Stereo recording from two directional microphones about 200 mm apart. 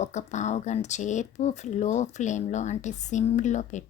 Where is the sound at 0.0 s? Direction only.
35° left (ahead or behind).